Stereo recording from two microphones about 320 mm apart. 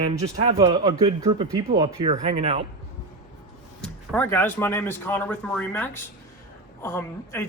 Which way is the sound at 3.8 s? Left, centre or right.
Centre.